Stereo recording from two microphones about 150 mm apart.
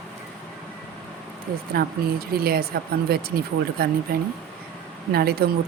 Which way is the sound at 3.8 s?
85° right.